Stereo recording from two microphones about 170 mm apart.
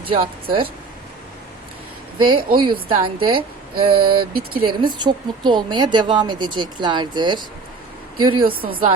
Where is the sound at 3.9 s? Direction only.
60° right (ahead or behind).